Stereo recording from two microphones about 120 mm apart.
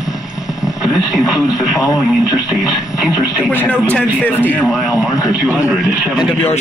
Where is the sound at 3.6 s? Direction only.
10° left (ahead or behind).